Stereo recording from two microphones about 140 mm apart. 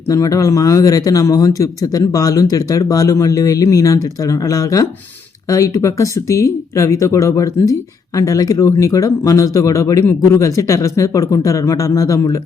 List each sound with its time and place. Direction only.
0.1 s speech: 25° left (ahead or behind)